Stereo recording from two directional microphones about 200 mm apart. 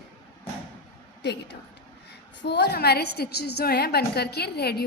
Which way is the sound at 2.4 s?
55° left (ahead or behind).